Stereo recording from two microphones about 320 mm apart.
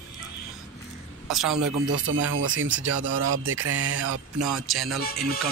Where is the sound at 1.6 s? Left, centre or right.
Right.